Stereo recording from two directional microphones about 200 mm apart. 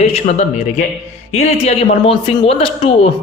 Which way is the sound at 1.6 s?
30° left (ahead or behind).